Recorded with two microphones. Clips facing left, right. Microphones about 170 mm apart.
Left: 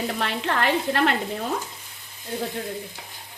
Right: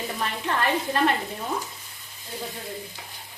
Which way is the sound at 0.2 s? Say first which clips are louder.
Right 1 dB; 90° left.